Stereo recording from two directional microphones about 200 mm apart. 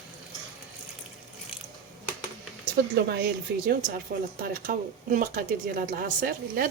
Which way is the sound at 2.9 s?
55° right (ahead or behind).